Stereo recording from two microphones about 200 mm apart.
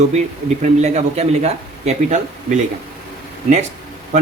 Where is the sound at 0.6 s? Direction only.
35° right (ahead or behind).